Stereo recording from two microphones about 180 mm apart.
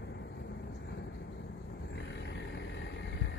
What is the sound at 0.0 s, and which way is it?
Vehicle, 70° left (ahead or behind).